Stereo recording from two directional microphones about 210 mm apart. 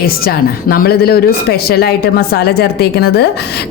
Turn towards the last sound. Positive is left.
turn(degrees=50)  # may be behind; listen again after turning